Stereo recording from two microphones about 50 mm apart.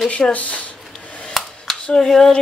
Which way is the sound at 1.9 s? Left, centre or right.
Centre.